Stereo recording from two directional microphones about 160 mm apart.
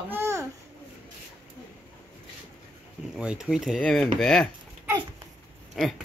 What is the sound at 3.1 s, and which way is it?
Speech, 5° right (ahead or behind).